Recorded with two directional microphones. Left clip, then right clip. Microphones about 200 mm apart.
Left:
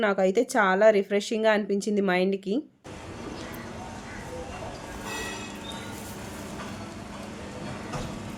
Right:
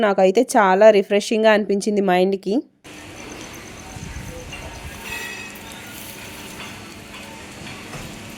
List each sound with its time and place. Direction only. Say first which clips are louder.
0.0 s speech: right 8 dB; 40° right (ahead or behind)